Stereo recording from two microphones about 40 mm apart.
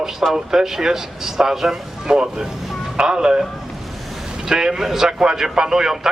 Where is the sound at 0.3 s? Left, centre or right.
Centre.